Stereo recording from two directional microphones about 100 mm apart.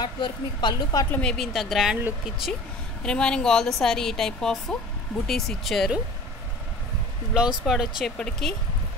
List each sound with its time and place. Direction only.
0.0 s speech: 45° left (ahead or behind)
1.1 s speech: 5° left (ahead or behind)
3.0 s speech: 10° left (ahead or behind)
7.3 s speech: 5° right (ahead or behind)